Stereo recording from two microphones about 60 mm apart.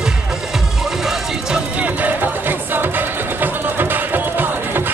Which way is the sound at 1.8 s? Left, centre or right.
Right.